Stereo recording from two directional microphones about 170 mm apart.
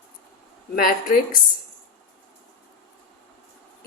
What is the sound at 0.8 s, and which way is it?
Speech, 60° left (ahead or behind).